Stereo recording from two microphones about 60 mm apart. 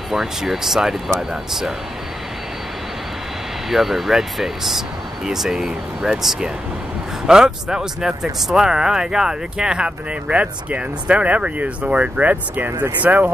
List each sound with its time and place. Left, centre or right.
0.1 s speech: centre
3.7 s speech: centre; by 13.3 s right